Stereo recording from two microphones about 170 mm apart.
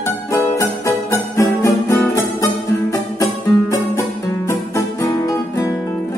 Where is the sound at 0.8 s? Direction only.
15° left (ahead or behind).